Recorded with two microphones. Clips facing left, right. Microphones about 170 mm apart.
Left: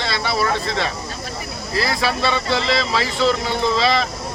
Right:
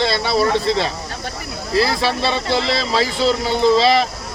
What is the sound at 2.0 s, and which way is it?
Speech, 30° right (ahead or behind).